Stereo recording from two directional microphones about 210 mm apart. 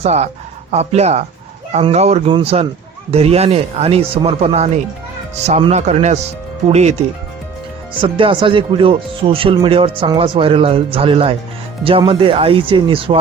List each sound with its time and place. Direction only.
0.0 s a man's voice: 30° right (ahead or behind)
8.0 s speech: 25° right (ahead or behind)